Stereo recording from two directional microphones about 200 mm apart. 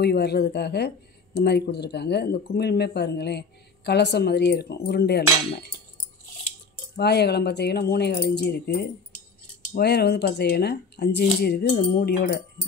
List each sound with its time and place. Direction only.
0.0 s speech: 55° left (ahead or behind)
7.0 s speech: 55° left (ahead or behind)